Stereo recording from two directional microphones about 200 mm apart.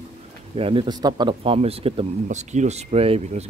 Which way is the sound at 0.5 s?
25° right (ahead or behind).